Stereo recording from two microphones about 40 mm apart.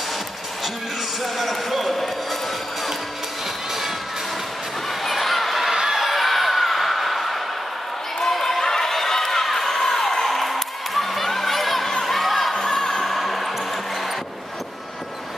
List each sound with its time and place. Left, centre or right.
1.2 s speech: centre
5.0 s a sound: centre
12.5 s music: centre
13.0 s music: centre